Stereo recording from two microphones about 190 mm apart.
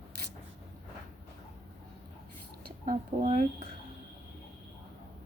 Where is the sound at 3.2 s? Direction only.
40° right (ahead or behind).